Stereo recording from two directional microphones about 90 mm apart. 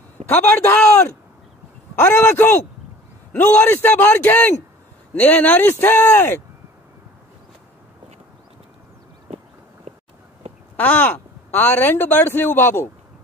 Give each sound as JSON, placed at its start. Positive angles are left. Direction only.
{"t": 0.3, "sound": "speech", "side_deg": 25}
{"t": 10.8, "sound": "speech", "side_deg": 20}